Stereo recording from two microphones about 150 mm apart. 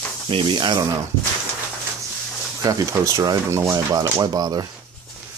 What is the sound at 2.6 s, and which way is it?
Speech, 25° right (ahead or behind).